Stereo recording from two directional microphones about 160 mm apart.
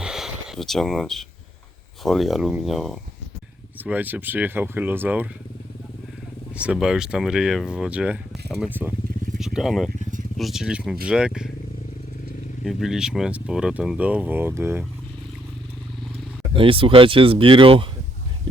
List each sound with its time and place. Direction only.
0.0 s a sound: 5° right (ahead or behind)
2.0 s speech: centre (ahead or behind)
3.8 s speech: 10° right (ahead or behind)
6.6 s speech: 5° right (ahead or behind)
12.6 s speech: 5° right (ahead or behind)
16.6 s speech: 35° right (ahead or behind)